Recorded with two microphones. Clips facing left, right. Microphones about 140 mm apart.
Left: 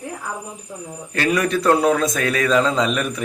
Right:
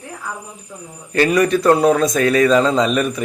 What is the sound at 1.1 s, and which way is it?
A man's voice, centre (ahead or behind).